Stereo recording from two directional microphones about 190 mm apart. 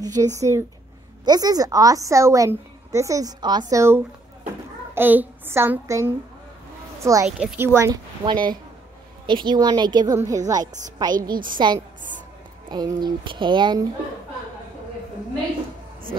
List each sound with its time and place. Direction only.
0.0 s a woman's voice: 20° right (ahead or behind)